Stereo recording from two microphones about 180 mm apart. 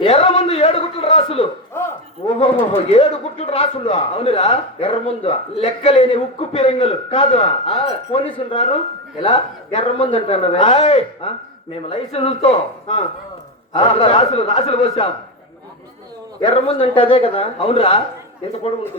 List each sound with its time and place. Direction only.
0.0 s a sound: 30° left (ahead or behind)
2.7 s a man's voice: 35° left (ahead or behind)
16.4 s a man's voice: 30° left (ahead or behind)